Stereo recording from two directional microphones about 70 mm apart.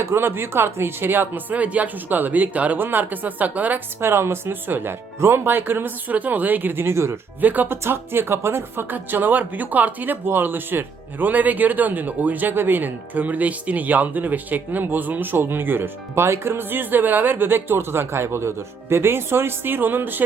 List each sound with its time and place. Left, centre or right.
0.0 s speech: right
4.0 s speech: right
7.4 s speech: right